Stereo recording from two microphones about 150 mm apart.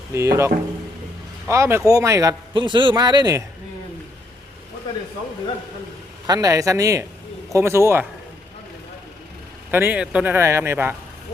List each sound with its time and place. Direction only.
0.1 s a man's voice: 20° right (ahead or behind)
6.2 s a man's voice: 25° right (ahead or behind)
9.7 s speech: 10° right (ahead or behind)